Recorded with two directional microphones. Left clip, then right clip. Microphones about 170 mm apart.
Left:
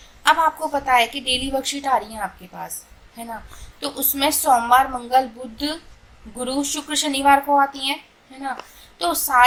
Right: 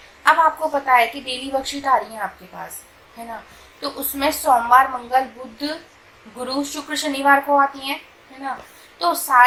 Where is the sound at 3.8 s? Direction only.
30° left (ahead or behind).